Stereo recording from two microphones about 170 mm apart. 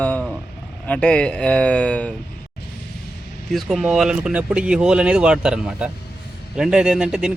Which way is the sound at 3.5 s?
Centre (ahead or behind).